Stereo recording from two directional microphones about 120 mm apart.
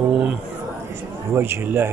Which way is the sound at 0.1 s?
10° right (ahead or behind).